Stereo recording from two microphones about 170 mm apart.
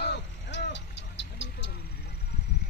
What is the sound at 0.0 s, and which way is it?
Music, 90° left.